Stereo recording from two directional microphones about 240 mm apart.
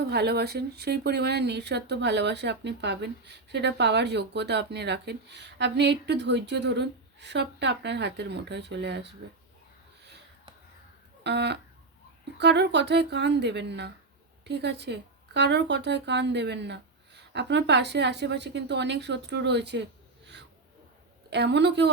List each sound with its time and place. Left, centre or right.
0.1 s speech: right
11.2 s speech: right
21.2 s a woman's voice: right